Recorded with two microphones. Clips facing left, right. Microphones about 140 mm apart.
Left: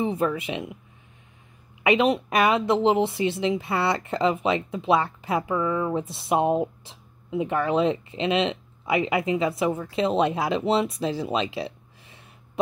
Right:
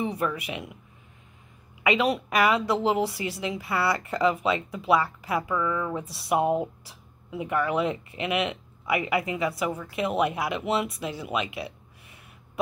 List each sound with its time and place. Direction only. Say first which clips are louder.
0.0 s speech: left 4 dB; 25° left (ahead or behind)
1.8 s speech: left 3 dB; 25° left (ahead or behind)